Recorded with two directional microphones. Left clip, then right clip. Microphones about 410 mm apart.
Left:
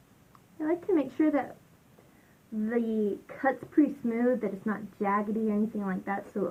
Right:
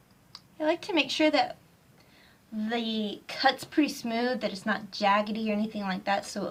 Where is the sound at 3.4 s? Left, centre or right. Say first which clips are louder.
Right 1 dB; centre.